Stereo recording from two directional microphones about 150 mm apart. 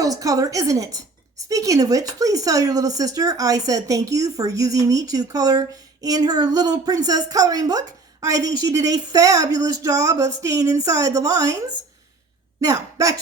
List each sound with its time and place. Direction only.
0.0 s a woman's voice: 25° right (ahead or behind)